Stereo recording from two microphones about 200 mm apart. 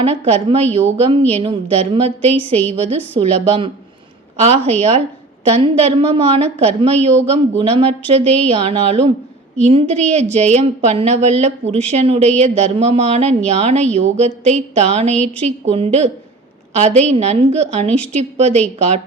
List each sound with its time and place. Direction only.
0.0 s a woman's voice: 30° right (ahead or behind)